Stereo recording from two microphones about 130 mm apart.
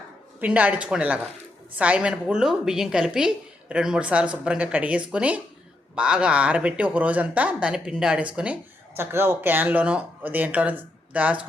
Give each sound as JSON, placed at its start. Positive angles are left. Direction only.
{"t": 0.3, "sound": "speech", "side_deg": -10}